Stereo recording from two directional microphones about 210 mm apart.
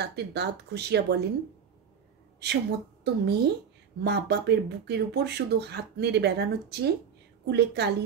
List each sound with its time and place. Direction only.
0.0 s speech: 50° right (ahead or behind)
2.4 s a woman's voice: 50° right (ahead or behind)